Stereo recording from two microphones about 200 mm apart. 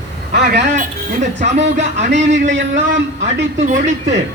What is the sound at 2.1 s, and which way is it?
A man's voice, 65° right (ahead or behind).